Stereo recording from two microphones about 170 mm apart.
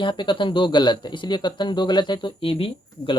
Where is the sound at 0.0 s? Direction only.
30° left (ahead or behind).